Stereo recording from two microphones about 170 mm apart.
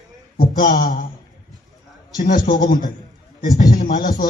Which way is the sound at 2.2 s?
55° left (ahead or behind).